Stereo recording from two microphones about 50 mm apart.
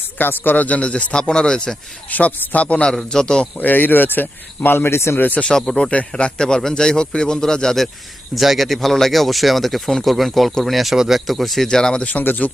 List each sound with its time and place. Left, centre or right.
0.2 s speech: left; by 1.7 s centre
2.0 s speech: left
2.9 s a man's voice: centre
3.6 s speech: left
5.1 s speech: left
5.4 s a man's voice: centre
5.9 s a man's voice: left
8.4 s a man's voice: centre
12.1 s speech: left